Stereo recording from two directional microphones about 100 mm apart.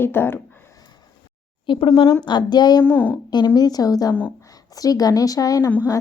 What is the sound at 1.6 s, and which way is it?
Speech, 55° left (ahead or behind).